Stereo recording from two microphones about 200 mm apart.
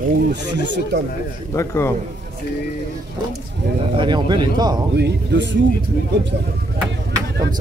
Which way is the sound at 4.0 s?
25° right (ahead or behind).